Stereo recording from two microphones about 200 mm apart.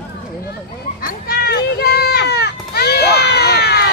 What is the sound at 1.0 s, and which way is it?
Children playing, 50° left (ahead or behind).